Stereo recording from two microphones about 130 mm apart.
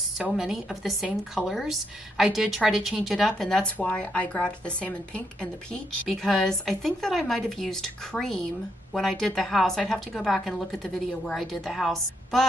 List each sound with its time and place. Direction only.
0.2 s speech: 5° right (ahead or behind)